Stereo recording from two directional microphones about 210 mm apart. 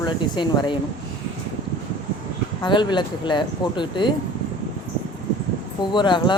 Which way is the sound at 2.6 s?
20° left (ahead or behind).